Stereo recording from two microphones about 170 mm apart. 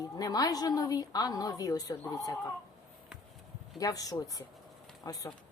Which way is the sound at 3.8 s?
20° left (ahead or behind).